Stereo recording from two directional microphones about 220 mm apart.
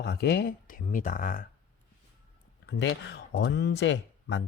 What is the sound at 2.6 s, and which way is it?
Speech, 55° left (ahead or behind).